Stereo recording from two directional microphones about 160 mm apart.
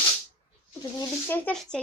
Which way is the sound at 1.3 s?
10° left (ahead or behind).